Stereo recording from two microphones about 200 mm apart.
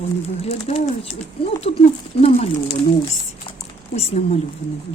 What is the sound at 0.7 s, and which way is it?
Speech, 35° left (ahead or behind).